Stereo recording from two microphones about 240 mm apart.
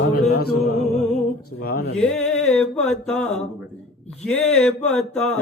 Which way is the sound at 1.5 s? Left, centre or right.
Left.